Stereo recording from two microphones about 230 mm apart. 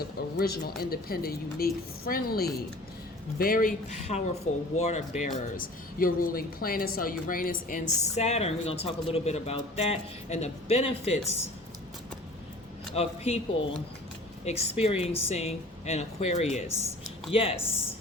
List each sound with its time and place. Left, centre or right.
0.3 s a woman's voice: left
12.9 s speech: left